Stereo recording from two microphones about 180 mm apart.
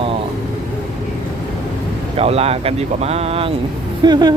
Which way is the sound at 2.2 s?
35° right (ahead or behind).